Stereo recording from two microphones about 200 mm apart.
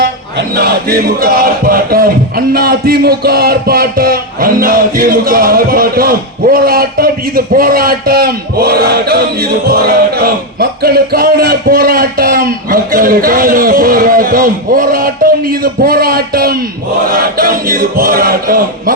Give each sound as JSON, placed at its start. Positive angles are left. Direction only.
{"t": 0.5, "sound": "music", "side_deg": -50}